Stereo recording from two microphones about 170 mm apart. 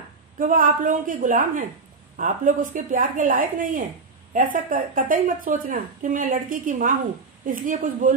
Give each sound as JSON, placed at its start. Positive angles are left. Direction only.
{"t": 0.4, "sound": "speech", "side_deg": -50}